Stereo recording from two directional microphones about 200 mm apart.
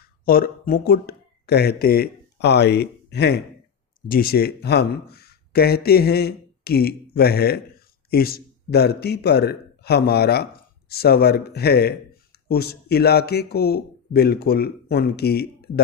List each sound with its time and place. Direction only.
0.3 s speech: 45° left (ahead or behind)